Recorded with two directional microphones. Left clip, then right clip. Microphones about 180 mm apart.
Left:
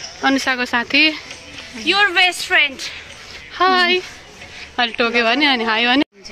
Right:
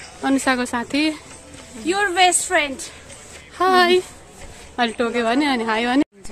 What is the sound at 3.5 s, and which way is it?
A woman's voice, 10° right (ahead or behind).